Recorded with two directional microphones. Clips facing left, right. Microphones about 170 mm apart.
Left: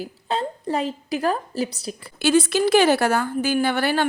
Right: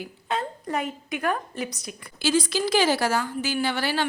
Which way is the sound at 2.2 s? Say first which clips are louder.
Left 5 dB; 60° left (ahead or behind).